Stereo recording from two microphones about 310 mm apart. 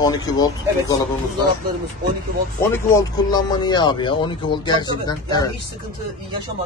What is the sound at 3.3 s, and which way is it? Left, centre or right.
Speech, centre.